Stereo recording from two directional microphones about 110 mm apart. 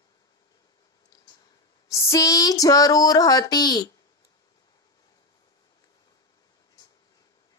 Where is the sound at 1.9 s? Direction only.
30° left (ahead or behind).